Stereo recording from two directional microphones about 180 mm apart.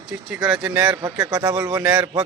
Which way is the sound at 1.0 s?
15° right (ahead or behind).